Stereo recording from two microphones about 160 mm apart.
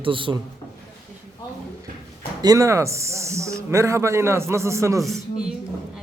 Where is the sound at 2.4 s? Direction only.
20° right (ahead or behind).